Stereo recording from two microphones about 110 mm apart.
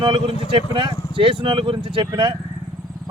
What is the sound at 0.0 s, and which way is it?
A man's voice, 50° right (ahead or behind).